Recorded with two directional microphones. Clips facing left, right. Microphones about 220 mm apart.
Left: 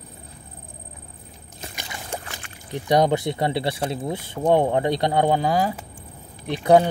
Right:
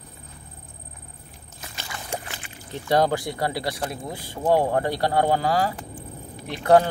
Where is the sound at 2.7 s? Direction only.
15° left (ahead or behind).